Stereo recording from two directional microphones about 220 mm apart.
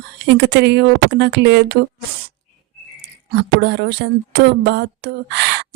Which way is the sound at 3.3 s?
50° right (ahead or behind).